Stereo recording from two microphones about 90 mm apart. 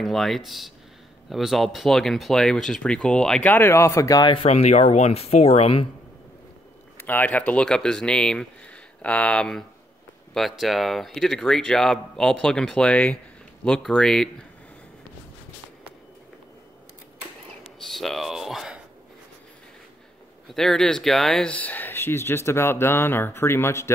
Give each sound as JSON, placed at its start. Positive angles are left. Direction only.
{"t": 0.0, "sound": "speech", "side_deg": 0}
{"t": 3.5, "sound": "speech", "side_deg": 30}
{"t": 4.2, "sound": "speech", "side_deg": 80}
{"t": 7.0, "sound": "speech", "side_deg": 20}
{"t": 17.9, "sound": "speech", "side_deg": 0}
{"t": 20.5, "sound": "speech", "side_deg": 5}